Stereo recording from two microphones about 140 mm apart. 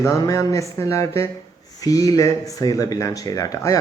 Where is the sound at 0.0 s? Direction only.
25° left (ahead or behind).